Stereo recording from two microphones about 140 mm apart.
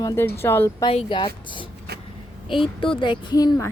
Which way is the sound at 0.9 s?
35° left (ahead or behind).